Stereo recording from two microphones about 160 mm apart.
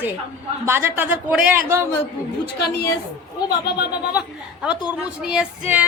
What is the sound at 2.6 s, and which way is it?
Speech, 90° left.